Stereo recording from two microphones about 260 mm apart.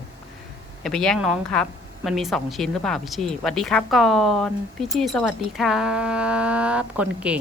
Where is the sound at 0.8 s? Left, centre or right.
Centre.